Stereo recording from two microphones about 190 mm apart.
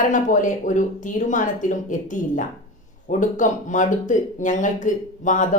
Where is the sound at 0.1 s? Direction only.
40° left (ahead or behind).